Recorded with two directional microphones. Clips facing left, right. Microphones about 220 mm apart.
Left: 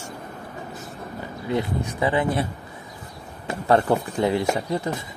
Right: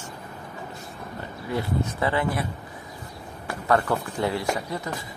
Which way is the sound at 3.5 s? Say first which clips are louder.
Left 4 dB; 25° left (ahead or behind).